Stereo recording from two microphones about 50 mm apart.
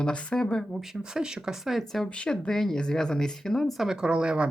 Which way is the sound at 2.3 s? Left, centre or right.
Centre.